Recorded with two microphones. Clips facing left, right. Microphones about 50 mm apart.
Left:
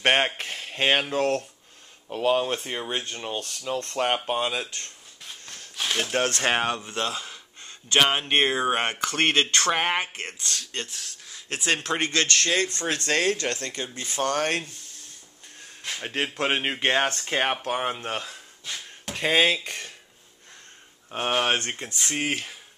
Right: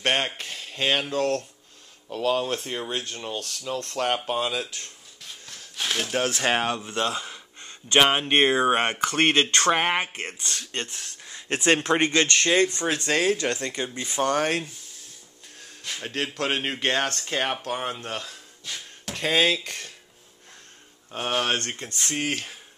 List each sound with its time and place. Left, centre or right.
0.0 s speech: left; by 4.6 s centre
5.5 s a sound: centre
6.2 s speech: centre
7.6 s speech: centre
10.1 s speech: centre
15.8 s speech: centre
21.1 s speech: centre